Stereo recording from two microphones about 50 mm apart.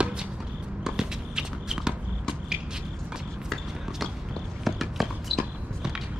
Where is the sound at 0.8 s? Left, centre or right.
Centre.